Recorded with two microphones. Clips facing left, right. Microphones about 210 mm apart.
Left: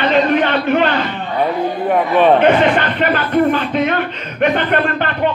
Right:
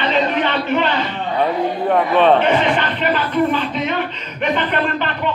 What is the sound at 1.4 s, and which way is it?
A man's voice, 5° left (ahead or behind).